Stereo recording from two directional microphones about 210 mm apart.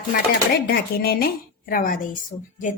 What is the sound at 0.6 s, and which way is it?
A woman's voice, 50° left (ahead or behind).